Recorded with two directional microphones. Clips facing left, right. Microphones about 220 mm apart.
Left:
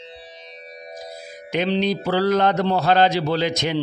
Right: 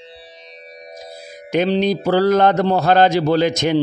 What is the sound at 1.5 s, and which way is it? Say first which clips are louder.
Speech: right 4 dB; 45° right (ahead or behind).